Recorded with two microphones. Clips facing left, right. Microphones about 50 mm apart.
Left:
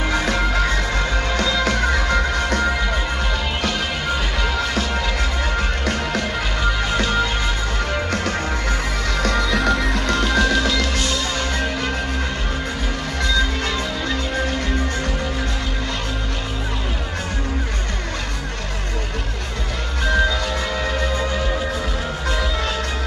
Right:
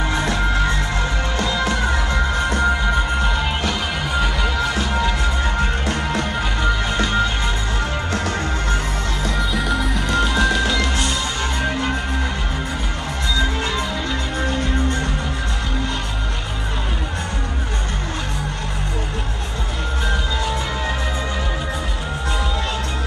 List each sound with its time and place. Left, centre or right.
0.6 s music: right
1.4 s music: left
2.3 s music: right
7.0 s music: right
7.9 s music: left
9.2 s music: left
9.6 s music: centre
10.0 s music: centre
13.3 s music: right